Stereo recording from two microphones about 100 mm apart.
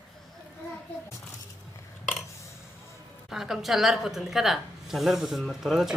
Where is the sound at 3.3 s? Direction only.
5° right (ahead or behind).